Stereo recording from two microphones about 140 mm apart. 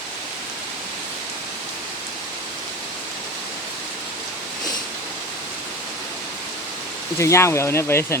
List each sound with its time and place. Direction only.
7.2 s speech: 20° left (ahead or behind)